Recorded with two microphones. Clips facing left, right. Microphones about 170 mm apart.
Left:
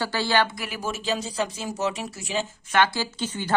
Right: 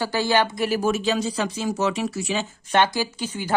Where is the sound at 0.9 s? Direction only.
70° right (ahead or behind); by 2.4 s 90° right.